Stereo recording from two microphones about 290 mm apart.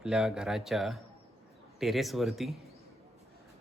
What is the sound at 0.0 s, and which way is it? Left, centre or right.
Speech, centre.